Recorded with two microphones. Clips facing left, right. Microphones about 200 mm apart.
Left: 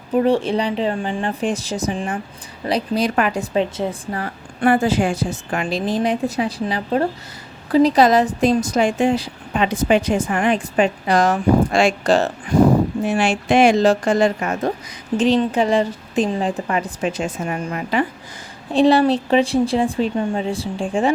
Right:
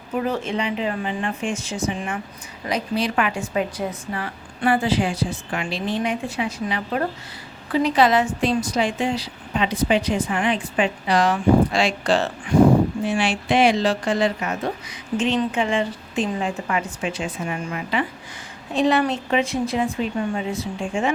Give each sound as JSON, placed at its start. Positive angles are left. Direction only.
{"t": 0.2, "sound": "a woman's voice", "side_deg": 30}
{"t": 15.2, "sound": "a woman's voice", "side_deg": 35}
{"t": 18.7, "sound": "a woman's voice", "side_deg": 30}